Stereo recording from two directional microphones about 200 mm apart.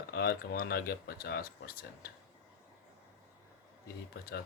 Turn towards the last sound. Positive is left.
turn(degrees=55)  # may be behind; listen again after turning